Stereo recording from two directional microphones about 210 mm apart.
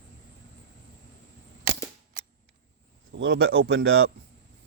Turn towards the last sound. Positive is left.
turn(degrees=-60)  # may be behind; listen again after turning